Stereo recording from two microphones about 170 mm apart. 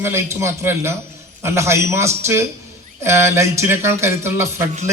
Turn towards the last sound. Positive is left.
turn(degrees=-15)  # may be behind; listen again after turning